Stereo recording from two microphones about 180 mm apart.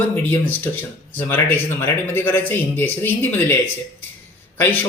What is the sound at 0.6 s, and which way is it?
Speech, 10° left (ahead or behind).